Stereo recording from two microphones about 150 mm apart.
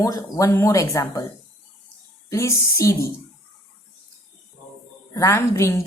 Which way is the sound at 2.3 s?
20° left (ahead or behind).